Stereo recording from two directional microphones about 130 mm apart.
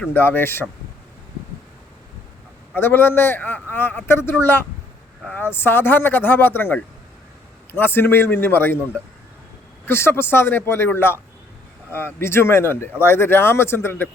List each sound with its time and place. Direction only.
0.0 s a man's voice: 15° left (ahead or behind)
2.7 s a man's voice: 15° left (ahead or behind)
9.8 s a man's voice: 20° left (ahead or behind)